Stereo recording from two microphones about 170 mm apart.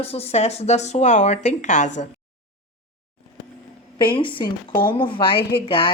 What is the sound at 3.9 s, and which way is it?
A woman's voice, 30° left (ahead or behind).